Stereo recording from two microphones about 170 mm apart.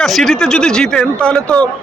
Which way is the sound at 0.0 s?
Centre (ahead or behind).